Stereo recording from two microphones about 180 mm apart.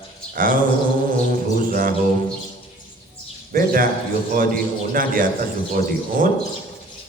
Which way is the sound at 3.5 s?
55° right (ahead or behind).